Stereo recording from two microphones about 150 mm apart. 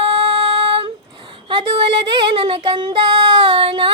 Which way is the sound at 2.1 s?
35° right (ahead or behind).